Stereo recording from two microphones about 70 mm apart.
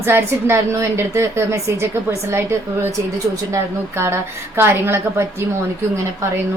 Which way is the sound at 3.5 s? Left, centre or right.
Right.